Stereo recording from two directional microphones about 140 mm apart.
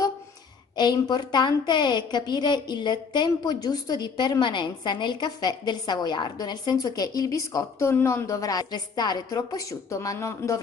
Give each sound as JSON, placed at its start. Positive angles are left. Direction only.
{"t": 0.7, "sound": "a woman's voice", "side_deg": 30}